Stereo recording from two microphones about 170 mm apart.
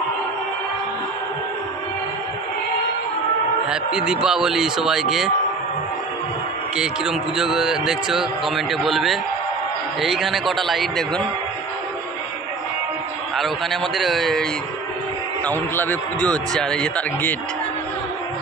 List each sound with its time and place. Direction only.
3.6 s a man's voice: 5° right (ahead or behind)
6.8 s a man's voice: 5° right (ahead or behind)
13.4 s a man's voice: centre (ahead or behind)